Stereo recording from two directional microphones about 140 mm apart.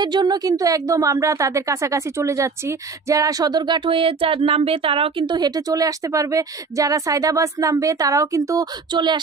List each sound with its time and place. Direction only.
0.0 s speech: 30° right (ahead or behind)